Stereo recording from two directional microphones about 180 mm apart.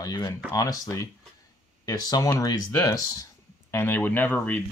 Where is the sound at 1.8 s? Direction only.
20° left (ahead or behind).